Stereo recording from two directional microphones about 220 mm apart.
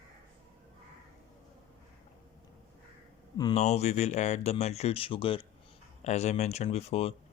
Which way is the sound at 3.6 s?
30° left (ahead or behind).